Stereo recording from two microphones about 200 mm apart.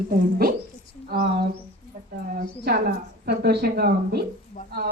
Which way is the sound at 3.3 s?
50° right (ahead or behind).